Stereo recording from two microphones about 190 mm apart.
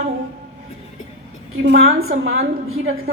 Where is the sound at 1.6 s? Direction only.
90° right.